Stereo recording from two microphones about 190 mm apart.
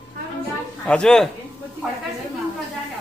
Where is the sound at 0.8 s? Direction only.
5° left (ahead or behind).